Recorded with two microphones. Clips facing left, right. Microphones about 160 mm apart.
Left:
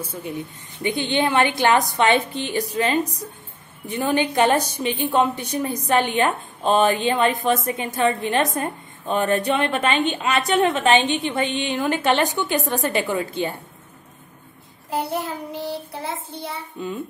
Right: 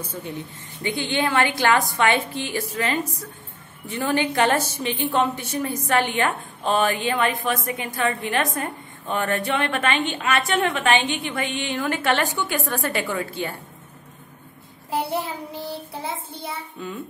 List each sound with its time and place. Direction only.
0.0 s a woman's voice: 10° left (ahead or behind)
0.8 s a woman's voice: 20° left (ahead or behind)
15.5 s a woman's voice: 25° left (ahead or behind)